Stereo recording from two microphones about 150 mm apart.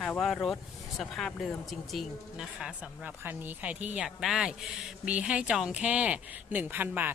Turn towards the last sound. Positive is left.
turn(degrees=-10)  # may be behind; listen again after turning